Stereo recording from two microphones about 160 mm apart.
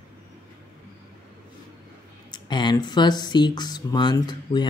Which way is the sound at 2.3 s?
25° left (ahead or behind).